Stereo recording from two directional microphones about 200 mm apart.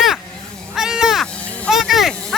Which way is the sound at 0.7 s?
Centre (ahead or behind).